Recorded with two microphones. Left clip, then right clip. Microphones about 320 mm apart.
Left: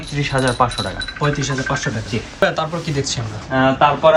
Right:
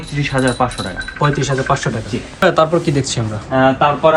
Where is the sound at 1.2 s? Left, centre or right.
Centre.